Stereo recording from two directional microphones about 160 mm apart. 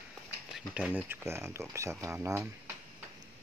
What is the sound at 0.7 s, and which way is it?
Speech, 10° right (ahead or behind).